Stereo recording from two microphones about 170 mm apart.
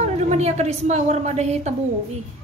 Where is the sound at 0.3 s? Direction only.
40° right (ahead or behind).